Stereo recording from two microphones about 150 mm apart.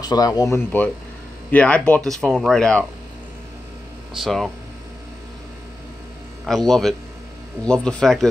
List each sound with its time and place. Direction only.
0.0 s speech: 25° left (ahead or behind); by 2.8 s 5° left (ahead or behind)
4.1 s speech: centre (ahead or behind)
6.4 s speech: centre (ahead or behind)